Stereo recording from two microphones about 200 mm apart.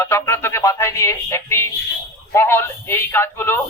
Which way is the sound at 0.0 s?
15° left (ahead or behind).